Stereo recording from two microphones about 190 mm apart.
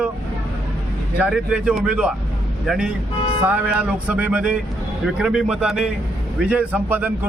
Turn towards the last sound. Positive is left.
turn(degrees=-10)  # may be behind; listen again after turning